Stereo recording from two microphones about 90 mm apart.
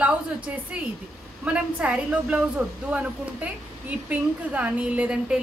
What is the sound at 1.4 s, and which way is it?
A woman's voice, 15° right (ahead or behind).